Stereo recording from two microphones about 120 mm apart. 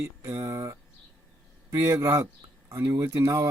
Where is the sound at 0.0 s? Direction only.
25° right (ahead or behind).